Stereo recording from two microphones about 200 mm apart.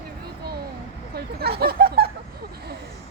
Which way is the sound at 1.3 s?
50° right (ahead or behind).